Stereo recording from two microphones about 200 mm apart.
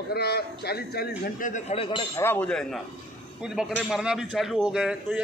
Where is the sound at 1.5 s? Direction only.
30° left (ahead or behind).